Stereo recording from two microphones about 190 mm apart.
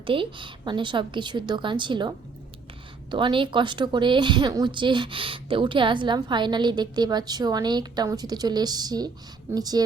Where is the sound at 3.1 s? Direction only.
25° right (ahead or behind).